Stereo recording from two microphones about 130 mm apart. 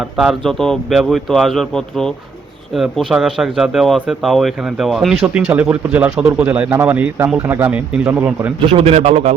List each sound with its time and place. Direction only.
0.2 s speech: centre (ahead or behind); by 8.5 s 15° right (ahead or behind)
8.6 s a man's voice: 50° right (ahead or behind)